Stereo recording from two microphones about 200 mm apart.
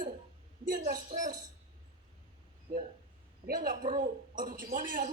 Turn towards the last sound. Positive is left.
turn(degrees=-40)  # may be behind; listen again after turning